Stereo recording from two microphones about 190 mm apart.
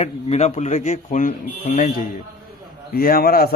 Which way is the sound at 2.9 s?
50° left (ahead or behind).